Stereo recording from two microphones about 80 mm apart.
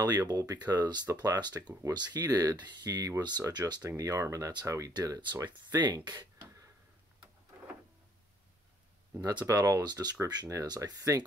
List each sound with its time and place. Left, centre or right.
0.0 s speech: right
2.5 s speech: right
3.9 s speech: right
5.3 s speech: right
6.3 s a sound: right
9.5 s speech: right
10.5 s speech: right